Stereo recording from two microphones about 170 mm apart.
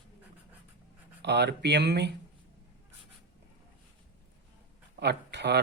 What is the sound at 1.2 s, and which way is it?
Speech, 80° right.